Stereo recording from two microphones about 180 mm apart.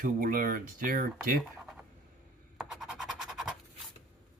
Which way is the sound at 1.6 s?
Centre (ahead or behind).